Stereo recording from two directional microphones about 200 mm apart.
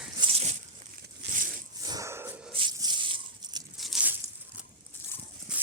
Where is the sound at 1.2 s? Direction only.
60° right (ahead or behind).